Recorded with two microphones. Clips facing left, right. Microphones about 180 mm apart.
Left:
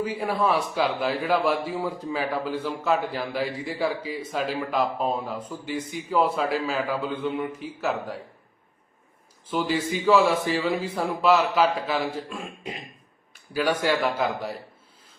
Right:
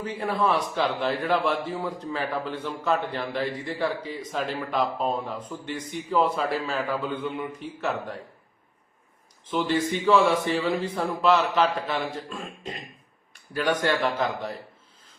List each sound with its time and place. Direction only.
0.0 s a man's voice: 10° left (ahead or behind)
9.5 s a man's voice: 10° left (ahead or behind)